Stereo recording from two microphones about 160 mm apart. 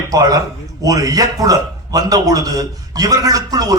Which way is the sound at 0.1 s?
20° right (ahead or behind).